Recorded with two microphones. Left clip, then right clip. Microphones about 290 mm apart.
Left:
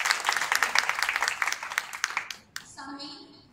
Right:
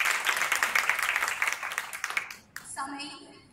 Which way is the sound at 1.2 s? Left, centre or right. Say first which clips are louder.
Left 1 dB; left.